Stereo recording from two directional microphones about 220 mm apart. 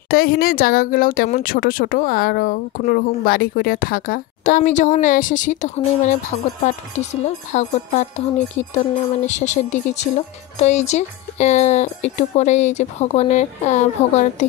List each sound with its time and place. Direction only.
0.1 s speech: 40° left (ahead or behind)